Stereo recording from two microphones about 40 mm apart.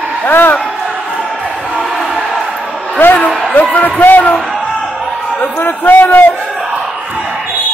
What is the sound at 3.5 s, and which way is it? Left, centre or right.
Speech, left.